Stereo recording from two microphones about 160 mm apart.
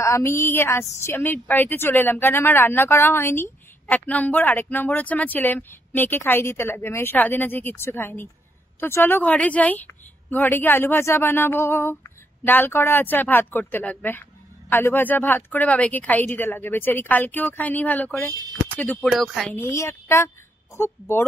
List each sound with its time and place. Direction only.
0.0 s a woman's voice: 15° left (ahead or behind)
19.5 s a woman's voice: 15° left (ahead or behind)